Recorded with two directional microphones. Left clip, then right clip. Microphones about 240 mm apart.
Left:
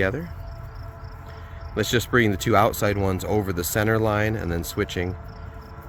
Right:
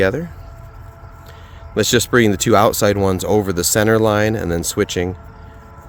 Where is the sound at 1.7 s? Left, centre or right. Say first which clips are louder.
Right 7 dB; right.